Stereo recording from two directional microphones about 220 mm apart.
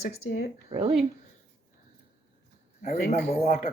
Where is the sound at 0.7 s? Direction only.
25° right (ahead or behind).